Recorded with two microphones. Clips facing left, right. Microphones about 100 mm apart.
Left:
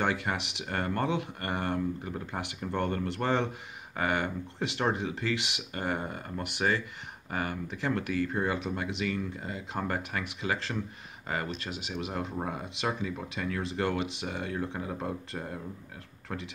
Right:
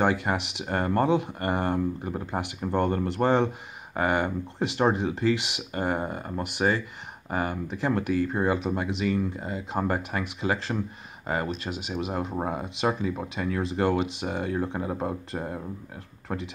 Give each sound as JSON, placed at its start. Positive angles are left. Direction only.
{"t": 0.1, "sound": "speech", "side_deg": -30}